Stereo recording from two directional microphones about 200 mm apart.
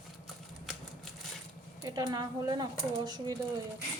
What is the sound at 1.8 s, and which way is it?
Speech, 20° right (ahead or behind).